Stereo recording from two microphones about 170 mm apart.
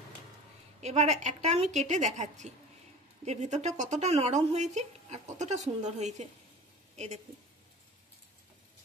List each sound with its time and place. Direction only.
0.7 s a woman's voice: 40° right (ahead or behind)